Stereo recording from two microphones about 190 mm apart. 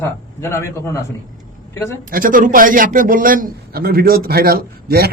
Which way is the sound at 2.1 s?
45° right (ahead or behind).